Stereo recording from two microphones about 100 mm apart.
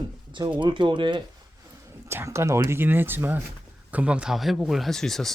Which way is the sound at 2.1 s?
25° right (ahead or behind).